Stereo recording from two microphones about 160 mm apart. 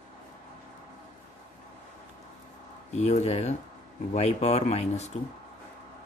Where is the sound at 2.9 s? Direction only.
45° left (ahead or behind).